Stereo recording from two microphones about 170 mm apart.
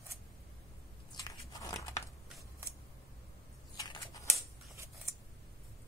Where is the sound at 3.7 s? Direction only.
25° left (ahead or behind).